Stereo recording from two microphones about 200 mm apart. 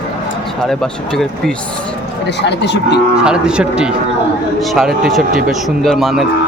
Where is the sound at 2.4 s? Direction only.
60° left (ahead or behind).